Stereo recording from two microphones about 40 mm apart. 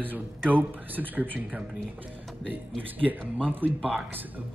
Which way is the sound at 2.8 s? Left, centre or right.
Right.